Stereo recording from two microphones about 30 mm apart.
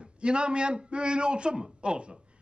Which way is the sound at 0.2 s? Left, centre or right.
Right.